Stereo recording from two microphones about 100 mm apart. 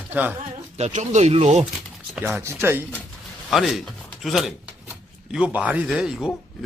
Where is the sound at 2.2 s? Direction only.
20° right (ahead or behind).